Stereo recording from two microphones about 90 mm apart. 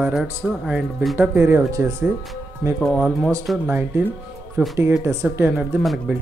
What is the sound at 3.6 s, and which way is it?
Speech, 25° right (ahead or behind).